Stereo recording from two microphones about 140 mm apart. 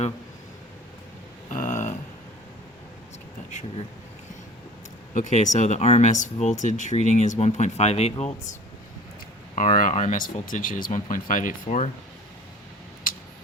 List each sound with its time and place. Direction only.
1.5 s a sound: 65° left (ahead or behind)
5.1 s speech: 60° left (ahead or behind)
9.6 s speech: 65° left (ahead or behind)